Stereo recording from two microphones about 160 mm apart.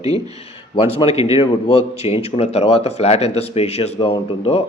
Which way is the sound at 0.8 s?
40° left (ahead or behind).